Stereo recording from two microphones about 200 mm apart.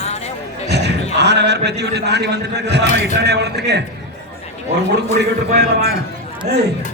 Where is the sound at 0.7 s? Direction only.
55° right (ahead or behind).